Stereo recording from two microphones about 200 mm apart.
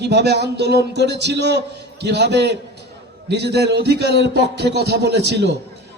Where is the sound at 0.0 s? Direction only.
55° right (ahead or behind).